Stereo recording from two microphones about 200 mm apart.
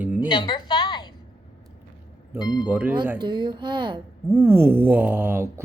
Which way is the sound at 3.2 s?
20° right (ahead or behind).